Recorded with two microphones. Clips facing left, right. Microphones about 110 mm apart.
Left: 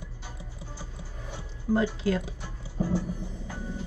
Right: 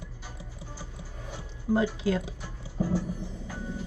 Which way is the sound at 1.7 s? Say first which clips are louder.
Even; 20° right (ahead or behind).